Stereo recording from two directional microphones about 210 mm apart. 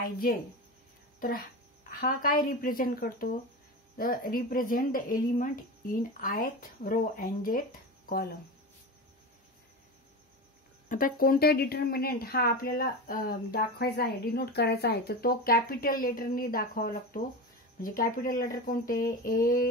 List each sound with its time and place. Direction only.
0.0 s speech: 45° left (ahead or behind)
2.0 s speech: 40° left (ahead or behind)
10.9 s speech: 40° left (ahead or behind)